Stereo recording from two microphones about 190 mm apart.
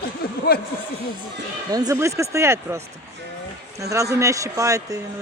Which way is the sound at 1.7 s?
20° right (ahead or behind).